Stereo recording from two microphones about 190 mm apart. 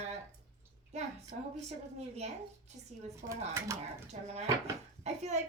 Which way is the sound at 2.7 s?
35° right (ahead or behind).